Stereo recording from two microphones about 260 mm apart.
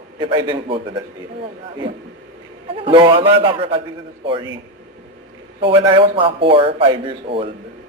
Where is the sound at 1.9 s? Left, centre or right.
Right.